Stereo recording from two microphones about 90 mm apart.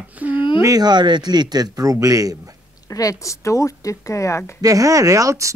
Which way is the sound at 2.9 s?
40° left (ahead or behind).